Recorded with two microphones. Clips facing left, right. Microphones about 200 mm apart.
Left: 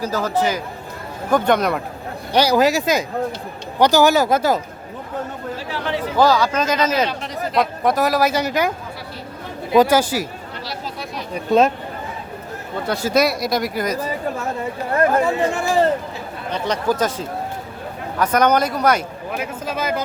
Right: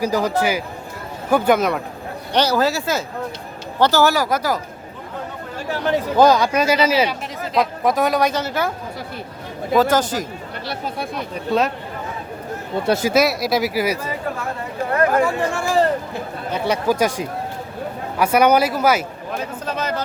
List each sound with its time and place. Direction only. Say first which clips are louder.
0.0 s speech: right 1 dB; 15° right (ahead or behind)
2.3 s speech: left 3 dB; 10° left (ahead or behind)
5.5 s chatter: right 6 dB; 45° right (ahead or behind)
6.1 s speech: right 1 dB; 20° right (ahead or behind); by 8.7 s 15° left (ahead or behind)
9.7 s speech: left 2 dB; 10° left (ahead or behind)
10.7 s speech: right 5 dB; 55° right (ahead or behind)
12.8 s speech: right 5 dB; 25° right (ahead or behind)
13.1 s speech: left 3 dB; centre (ahead or behind)
15.2 s speech: left 1 dB; 20° left (ahead or behind)
16.5 s speech: right 1 dB; 10° right (ahead or behind)
19.3 s speech: even; 10° left (ahead or behind)